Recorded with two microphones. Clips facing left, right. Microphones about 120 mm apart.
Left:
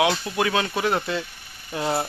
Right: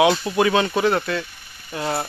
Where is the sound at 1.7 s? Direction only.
20° left (ahead or behind).